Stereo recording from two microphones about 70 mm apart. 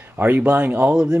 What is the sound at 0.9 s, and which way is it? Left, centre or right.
Speech, centre.